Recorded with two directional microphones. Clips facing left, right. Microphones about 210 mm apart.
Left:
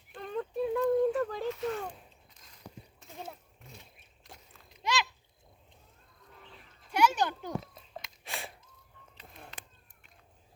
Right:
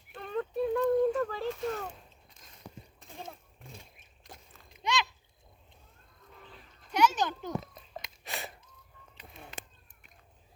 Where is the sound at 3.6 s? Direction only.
30° right (ahead or behind).